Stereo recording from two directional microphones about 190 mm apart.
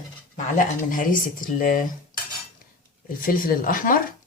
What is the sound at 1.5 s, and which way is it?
Speech, 45° left (ahead or behind).